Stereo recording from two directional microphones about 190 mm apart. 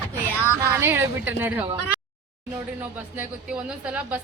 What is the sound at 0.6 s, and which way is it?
A woman's voice, 15° right (ahead or behind).